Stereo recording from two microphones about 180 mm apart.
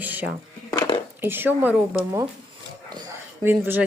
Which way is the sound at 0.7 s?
20° left (ahead or behind).